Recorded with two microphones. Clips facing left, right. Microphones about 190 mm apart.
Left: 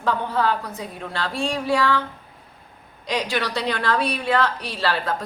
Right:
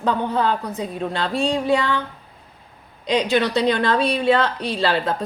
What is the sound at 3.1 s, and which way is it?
A woman's voice, 20° right (ahead or behind).